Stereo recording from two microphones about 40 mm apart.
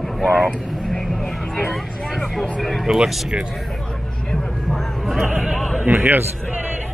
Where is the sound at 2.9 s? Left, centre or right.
Centre.